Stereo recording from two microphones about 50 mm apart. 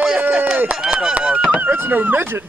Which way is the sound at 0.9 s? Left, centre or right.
Right.